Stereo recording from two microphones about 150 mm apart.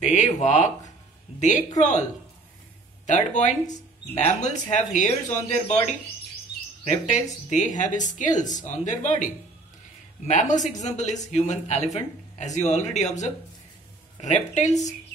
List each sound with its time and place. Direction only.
0.0 s speech: 50° left (ahead or behind)
3.1 s speech: 55° left (ahead or behind)